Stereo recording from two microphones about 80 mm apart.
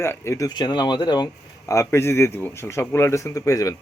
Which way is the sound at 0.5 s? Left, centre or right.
Left.